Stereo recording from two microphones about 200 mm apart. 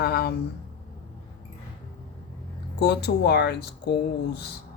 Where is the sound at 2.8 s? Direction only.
55° left (ahead or behind).